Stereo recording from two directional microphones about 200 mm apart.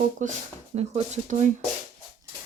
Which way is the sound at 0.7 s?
35° right (ahead or behind).